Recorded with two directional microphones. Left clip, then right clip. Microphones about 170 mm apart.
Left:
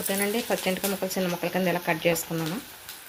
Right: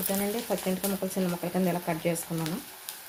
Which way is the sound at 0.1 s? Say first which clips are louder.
Left 4 dB; 10° left (ahead or behind).